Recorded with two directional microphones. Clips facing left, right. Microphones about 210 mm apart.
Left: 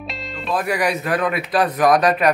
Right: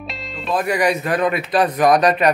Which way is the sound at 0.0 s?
Centre (ahead or behind).